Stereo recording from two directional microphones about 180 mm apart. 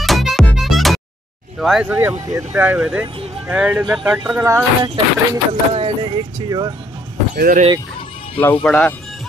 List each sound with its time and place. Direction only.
0.0 s music: centre (ahead or behind)
1.6 s speech: 5° right (ahead or behind)
4.8 s speech: 30° right (ahead or behind)
7.3 s speech: 50° right (ahead or behind)
8.6 s speech: 5° left (ahead or behind)